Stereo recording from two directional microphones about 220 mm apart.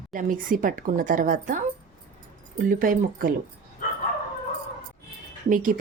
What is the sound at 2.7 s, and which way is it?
Speech, 40° right (ahead or behind).